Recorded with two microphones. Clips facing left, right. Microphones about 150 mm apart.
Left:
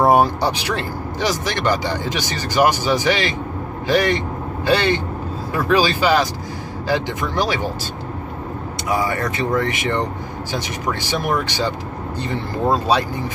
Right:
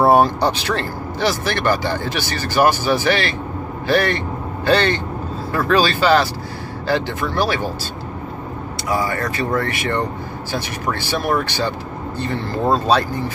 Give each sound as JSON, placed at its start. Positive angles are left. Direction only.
{"t": 0.1, "sound": "speech", "side_deg": 10}
{"t": 8.8, "sound": "speech", "side_deg": 20}